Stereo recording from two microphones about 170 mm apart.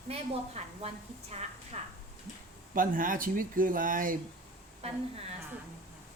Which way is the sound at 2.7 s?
55° right (ahead or behind).